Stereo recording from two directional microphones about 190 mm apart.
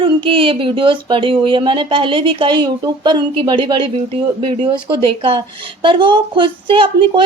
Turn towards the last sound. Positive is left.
turn(degrees=-25)  # may be behind; listen again after turning